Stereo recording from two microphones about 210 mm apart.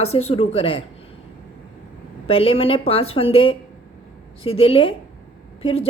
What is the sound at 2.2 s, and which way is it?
A woman's voice, 25° left (ahead or behind).